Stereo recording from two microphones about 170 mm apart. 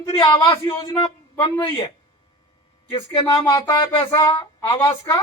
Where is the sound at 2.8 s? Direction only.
30° left (ahead or behind).